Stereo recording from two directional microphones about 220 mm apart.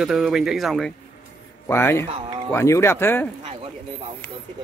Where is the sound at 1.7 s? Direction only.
10° left (ahead or behind).